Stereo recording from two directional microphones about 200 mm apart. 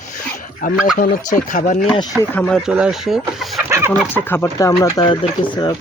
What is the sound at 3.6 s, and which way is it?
Chicken, 15° right (ahead or behind).